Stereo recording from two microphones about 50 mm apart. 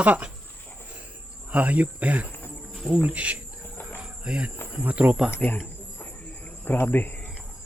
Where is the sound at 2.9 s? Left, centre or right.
Right.